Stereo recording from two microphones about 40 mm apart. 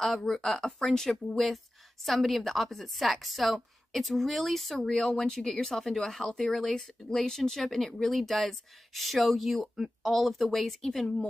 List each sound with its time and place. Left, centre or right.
0.2 s speech: centre
0.5 s a woman's voice: centre
4.7 s speech: centre